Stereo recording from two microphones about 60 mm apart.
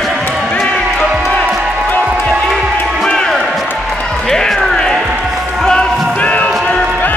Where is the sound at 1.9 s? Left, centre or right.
Left.